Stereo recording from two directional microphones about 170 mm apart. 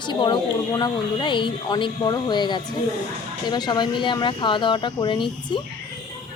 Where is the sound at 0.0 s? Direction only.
25° left (ahead or behind).